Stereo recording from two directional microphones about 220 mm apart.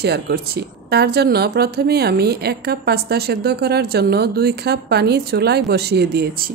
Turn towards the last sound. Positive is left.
turn(degrees=-45)  # may be behind; listen again after turning